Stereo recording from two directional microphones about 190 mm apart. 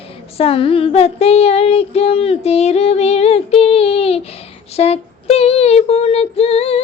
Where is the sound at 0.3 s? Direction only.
30° left (ahead or behind).